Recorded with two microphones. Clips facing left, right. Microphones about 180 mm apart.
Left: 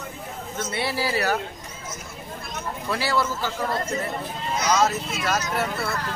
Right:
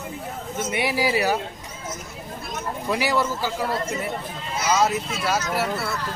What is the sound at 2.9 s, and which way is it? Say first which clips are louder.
A man's voice: right 2 dB; 15° right (ahead or behind).